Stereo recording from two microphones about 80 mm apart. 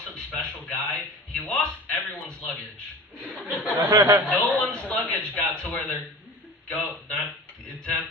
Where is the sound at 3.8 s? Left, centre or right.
Right.